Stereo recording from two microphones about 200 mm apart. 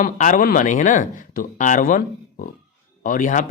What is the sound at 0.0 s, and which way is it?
Speech, 40° left (ahead or behind).